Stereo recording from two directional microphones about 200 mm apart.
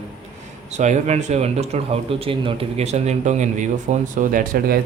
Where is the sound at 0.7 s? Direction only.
35° right (ahead or behind).